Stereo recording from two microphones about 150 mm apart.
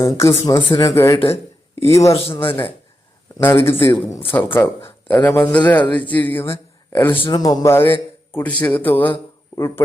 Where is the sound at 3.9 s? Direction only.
30° left (ahead or behind).